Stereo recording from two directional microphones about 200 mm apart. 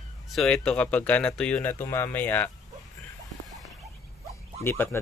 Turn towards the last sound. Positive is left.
turn(degrees=10)  # may be behind; listen again after turning